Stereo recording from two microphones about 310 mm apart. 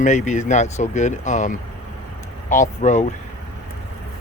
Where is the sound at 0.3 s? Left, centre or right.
Left.